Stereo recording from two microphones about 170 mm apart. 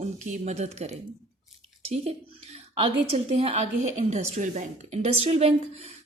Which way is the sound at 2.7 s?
35° right (ahead or behind).